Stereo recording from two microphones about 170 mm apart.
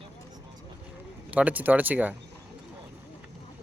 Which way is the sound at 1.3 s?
10° right (ahead or behind).